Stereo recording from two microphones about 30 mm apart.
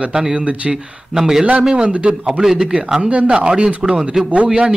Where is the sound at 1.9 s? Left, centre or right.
Right.